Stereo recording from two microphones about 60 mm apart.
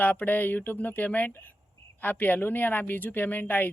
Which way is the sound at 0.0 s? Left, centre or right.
Left.